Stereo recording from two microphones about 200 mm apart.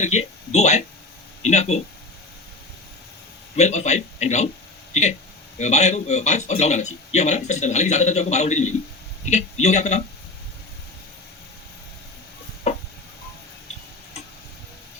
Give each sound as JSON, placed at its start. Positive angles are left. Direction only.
{"t": 0.0, "sound": "speech", "side_deg": 35}
{"t": 3.5, "sound": "a man's voice", "side_deg": 35}
{"t": 5.5, "sound": "a man's voice", "side_deg": 35}